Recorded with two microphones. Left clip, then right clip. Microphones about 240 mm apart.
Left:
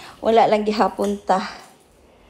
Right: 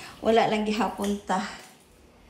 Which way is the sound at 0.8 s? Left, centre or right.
Left.